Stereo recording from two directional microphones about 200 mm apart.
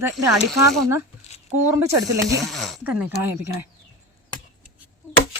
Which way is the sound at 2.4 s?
Centre (ahead or behind).